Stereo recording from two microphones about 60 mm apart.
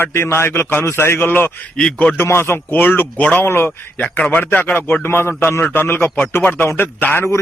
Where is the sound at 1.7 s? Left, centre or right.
Centre.